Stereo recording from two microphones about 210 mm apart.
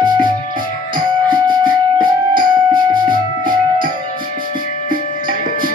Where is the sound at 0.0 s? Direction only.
20° right (ahead or behind).